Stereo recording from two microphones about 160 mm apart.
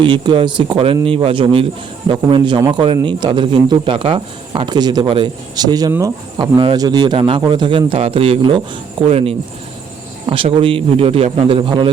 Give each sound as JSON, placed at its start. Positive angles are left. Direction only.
{"t": 0.0, "sound": "a man's voice", "side_deg": -30}